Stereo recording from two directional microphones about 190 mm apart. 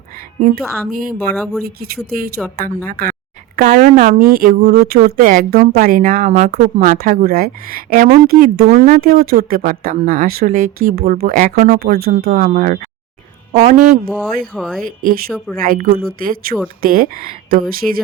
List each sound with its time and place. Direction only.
0.3 s a woman's voice: 45° right (ahead or behind)
8.3 s speech: 55° right (ahead or behind)
8.6 s speech: 40° right (ahead or behind)
9.0 s speech: 50° right (ahead or behind)
14.1 s speech: centre (ahead or behind)
14.8 s speech: 50° right (ahead or behind)
15.3 s speech: centre (ahead or behind)
15.6 s speech: 50° right (ahead or behind)